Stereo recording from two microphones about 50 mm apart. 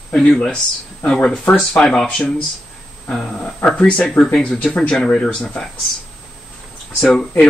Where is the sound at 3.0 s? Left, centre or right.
Left.